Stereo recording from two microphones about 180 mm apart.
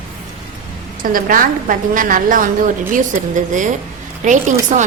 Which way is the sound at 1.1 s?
50° right (ahead or behind).